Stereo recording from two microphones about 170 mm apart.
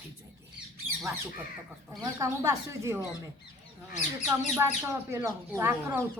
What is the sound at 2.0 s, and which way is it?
Speech, 15° right (ahead or behind).